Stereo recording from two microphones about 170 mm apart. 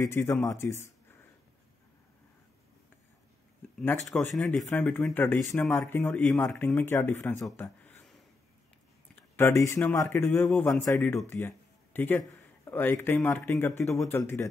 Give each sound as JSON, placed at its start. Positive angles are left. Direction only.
{"t": 0.0, "sound": "speech", "side_deg": 15}
{"t": 4.4, "sound": "speech", "side_deg": 10}
{"t": 6.1, "sound": "speech", "side_deg": 5}
{"t": 7.5, "sound": "a sound", "side_deg": 10}
{"t": 9.4, "sound": "speech", "side_deg": 15}